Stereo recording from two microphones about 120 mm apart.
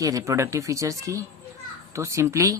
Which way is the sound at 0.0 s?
30° right (ahead or behind).